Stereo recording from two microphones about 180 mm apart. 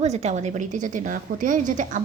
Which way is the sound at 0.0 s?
40° right (ahead or behind).